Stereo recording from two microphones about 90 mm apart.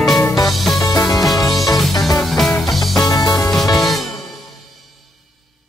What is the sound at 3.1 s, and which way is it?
Music, 45° left (ahead or behind).